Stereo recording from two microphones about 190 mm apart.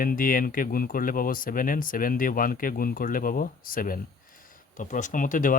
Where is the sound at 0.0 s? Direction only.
50° left (ahead or behind).